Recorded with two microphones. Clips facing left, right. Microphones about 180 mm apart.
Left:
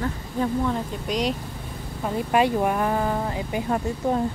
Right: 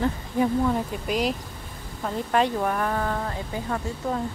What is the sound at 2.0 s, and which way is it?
Speech, 10° left (ahead or behind).